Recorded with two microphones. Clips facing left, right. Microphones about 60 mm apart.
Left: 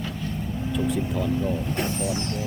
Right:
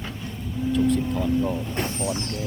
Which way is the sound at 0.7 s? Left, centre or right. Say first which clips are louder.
Right 5 dB; centre.